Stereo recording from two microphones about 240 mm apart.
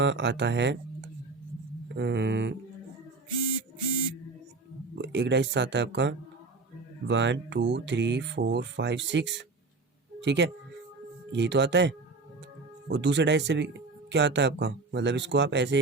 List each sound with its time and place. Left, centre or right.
0.0 s speech: right
2.0 s speech: right
4.9 s speech: right